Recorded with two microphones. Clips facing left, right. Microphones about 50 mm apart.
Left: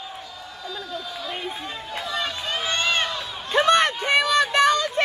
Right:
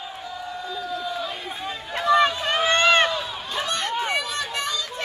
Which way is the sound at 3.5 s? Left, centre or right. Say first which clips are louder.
Left 10 dB; left.